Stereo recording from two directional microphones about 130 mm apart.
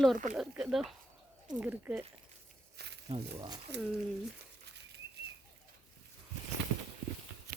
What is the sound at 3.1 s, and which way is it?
Speech, 35° right (ahead or behind).